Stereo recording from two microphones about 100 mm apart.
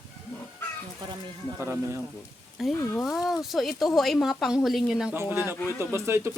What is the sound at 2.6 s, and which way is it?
Speech, centre (ahead or behind).